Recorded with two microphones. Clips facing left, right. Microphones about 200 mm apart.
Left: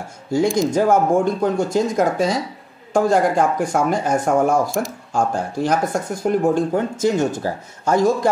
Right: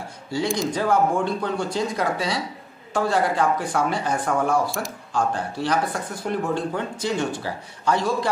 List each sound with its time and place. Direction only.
0.3 s speech: 45° left (ahead or behind)
4.6 s speech: centre (ahead or behind)
5.1 s speech: 45° left (ahead or behind)